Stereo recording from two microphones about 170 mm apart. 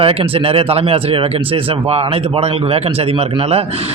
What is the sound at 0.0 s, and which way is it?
Speech, 35° right (ahead or behind).